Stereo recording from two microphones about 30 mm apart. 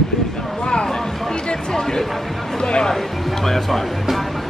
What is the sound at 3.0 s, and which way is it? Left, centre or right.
Music, centre.